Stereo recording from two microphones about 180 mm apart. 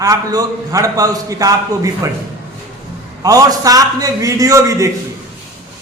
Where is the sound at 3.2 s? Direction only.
20° right (ahead or behind).